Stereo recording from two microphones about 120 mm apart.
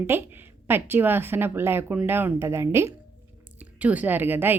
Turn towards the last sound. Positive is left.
turn(degrees=-15)  # may be behind; listen again after turning